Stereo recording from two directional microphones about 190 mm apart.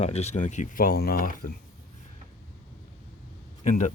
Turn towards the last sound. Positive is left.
turn(degrees=40)  # may be behind; listen again after turning